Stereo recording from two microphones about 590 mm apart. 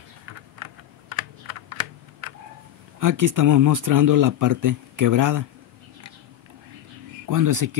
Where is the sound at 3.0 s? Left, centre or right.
Right.